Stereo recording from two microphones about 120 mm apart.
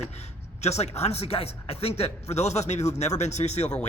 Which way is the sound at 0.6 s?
65° left (ahead or behind).